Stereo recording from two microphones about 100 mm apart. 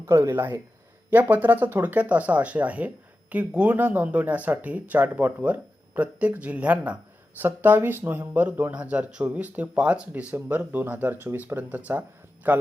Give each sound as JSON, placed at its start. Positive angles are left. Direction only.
{"t": 0.0, "sound": "speech", "side_deg": -25}